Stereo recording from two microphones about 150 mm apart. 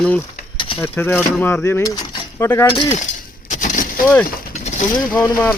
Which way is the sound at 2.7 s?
35° left (ahead or behind).